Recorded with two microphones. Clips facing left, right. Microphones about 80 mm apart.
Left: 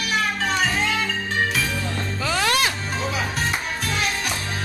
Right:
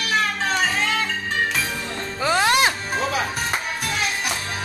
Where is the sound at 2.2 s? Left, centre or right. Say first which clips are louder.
Right 4 dB; right.